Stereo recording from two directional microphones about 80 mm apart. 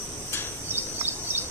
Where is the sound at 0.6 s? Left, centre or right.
Right.